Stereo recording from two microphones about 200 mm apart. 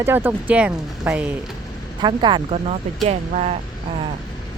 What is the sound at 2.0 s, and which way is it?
Speech, 20° right (ahead or behind).